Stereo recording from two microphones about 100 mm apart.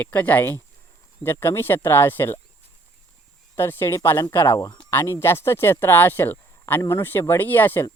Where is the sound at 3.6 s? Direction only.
25° left (ahead or behind).